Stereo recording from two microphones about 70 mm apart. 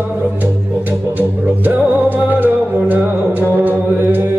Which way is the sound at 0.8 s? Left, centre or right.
Right.